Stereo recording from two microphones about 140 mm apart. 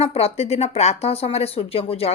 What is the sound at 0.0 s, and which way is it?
Speech, 45° left (ahead or behind).